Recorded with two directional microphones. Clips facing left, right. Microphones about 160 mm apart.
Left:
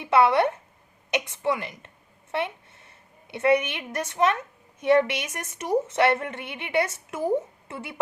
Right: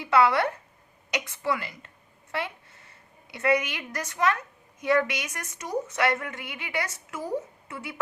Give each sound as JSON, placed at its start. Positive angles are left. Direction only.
{"t": 0.0, "sound": "a woman's voice", "side_deg": 20}